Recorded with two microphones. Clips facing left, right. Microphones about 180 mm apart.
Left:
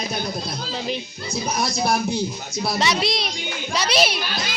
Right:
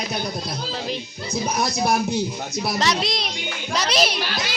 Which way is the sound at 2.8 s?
5° left (ahead or behind).